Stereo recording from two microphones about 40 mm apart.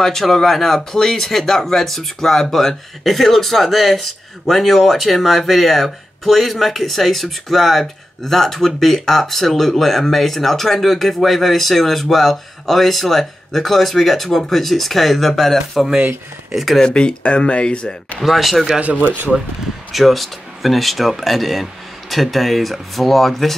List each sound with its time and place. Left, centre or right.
0.0 s speech: centre
16.8 s speech: left
18.2 s speech: centre
18.8 s speech: right
19.9 s speech: centre